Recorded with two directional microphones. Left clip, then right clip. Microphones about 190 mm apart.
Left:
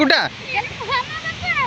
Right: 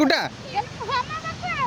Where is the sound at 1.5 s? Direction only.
5° left (ahead or behind).